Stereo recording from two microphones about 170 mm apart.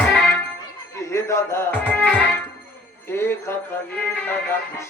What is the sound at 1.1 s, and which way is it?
Speech, 15° left (ahead or behind).